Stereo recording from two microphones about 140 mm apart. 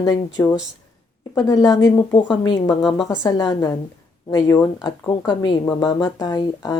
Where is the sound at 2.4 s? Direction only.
30° left (ahead or behind).